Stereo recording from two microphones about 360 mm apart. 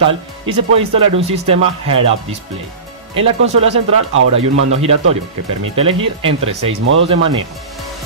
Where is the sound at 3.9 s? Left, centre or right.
Right.